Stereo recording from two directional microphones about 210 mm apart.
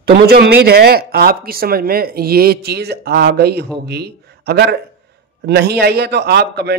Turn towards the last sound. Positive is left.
turn(degrees=-50)  # may be behind; listen again after turning